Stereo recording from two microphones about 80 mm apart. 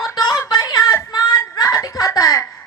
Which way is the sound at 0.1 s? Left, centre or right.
Left.